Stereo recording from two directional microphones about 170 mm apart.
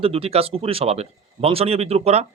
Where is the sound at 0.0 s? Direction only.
35° right (ahead or behind).